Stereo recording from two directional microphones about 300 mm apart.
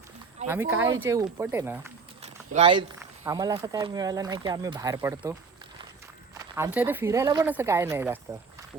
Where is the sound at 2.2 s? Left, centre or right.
Centre.